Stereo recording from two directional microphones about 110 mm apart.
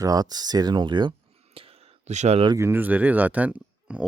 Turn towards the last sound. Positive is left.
turn(degrees=-10)  # may be behind; listen again after turning